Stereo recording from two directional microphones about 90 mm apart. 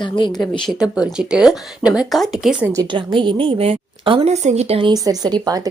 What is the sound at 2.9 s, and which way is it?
A woman's voice, 65° right (ahead or behind).